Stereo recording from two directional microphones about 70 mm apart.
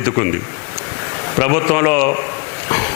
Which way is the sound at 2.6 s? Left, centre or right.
Left.